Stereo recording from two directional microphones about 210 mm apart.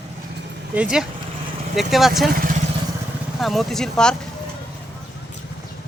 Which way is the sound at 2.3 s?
40° right (ahead or behind).